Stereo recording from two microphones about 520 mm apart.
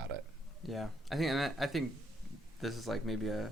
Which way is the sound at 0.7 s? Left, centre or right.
Centre.